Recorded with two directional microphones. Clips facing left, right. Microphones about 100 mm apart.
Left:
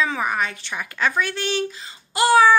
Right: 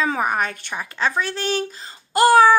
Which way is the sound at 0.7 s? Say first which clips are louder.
Even; 30° right (ahead or behind).